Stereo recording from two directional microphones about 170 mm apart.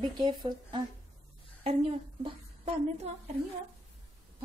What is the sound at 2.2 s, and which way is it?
Speech, 40° right (ahead or behind).